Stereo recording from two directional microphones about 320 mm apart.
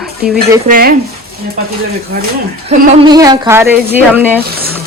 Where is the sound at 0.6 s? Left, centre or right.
Right.